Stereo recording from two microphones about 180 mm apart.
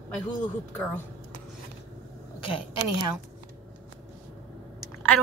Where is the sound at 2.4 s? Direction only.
30° left (ahead or behind).